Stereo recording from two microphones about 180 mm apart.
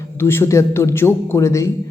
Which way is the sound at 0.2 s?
15° left (ahead or behind).